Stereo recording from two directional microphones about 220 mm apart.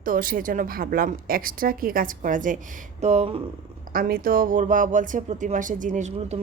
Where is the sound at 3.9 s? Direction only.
40° right (ahead or behind).